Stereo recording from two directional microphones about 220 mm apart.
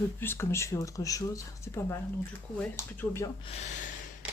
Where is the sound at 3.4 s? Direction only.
30° left (ahead or behind).